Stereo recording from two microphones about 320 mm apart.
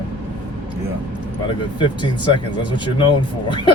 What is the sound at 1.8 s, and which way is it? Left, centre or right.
Speech, centre.